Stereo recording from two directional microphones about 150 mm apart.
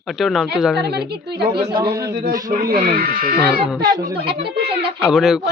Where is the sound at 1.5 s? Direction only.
30° right (ahead or behind).